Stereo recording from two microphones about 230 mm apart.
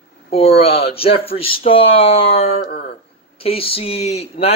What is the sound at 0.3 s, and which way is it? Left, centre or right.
Speech, left.